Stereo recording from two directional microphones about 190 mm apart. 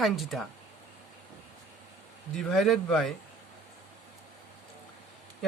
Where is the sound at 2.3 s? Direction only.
Centre (ahead or behind).